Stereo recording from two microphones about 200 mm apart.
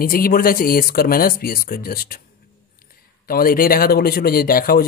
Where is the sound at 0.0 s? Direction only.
45° left (ahead or behind).